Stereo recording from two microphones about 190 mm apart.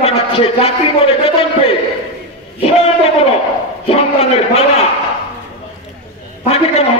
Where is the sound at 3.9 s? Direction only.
30° left (ahead or behind).